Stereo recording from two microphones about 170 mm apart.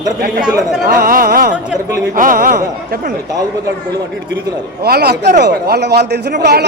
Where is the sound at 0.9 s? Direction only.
55° right (ahead or behind).